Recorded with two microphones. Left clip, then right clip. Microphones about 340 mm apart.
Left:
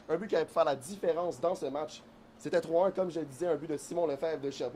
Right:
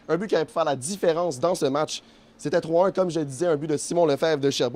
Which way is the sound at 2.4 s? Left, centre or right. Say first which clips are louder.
Right 7 dB; right.